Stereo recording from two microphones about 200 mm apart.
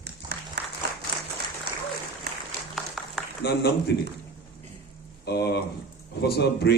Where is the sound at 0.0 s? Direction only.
55° right (ahead or behind).